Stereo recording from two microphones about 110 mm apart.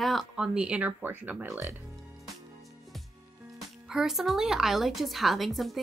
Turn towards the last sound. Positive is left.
turn(degrees=0)  # may be behind; listen again after turning